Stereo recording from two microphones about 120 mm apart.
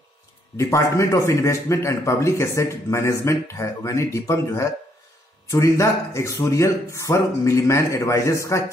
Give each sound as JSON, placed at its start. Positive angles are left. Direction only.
{"t": 0.6, "sound": "a man's voice", "side_deg": 25}